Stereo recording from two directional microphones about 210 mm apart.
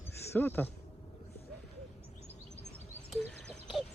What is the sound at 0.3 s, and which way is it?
Speech, 10° left (ahead or behind).